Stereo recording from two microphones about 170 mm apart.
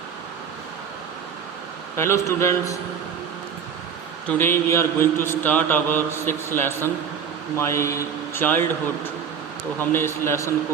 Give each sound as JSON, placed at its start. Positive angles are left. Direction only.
{"t": 2.0, "sound": "mantra", "side_deg": 15}
{"t": 4.3, "sound": "mantra", "side_deg": 15}
{"t": 9.9, "sound": "mantra", "side_deg": 15}